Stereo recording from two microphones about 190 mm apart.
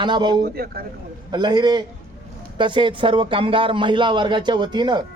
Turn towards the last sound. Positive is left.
turn(degrees=-25)  # may be behind; listen again after turning